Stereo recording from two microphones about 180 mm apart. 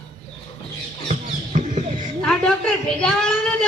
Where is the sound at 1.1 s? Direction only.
40° right (ahead or behind).